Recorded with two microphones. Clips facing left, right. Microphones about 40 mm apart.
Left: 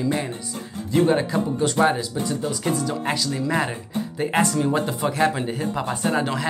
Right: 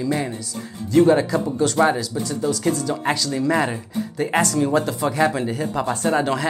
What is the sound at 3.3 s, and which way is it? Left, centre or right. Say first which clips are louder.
Speech: right 3 dB; centre.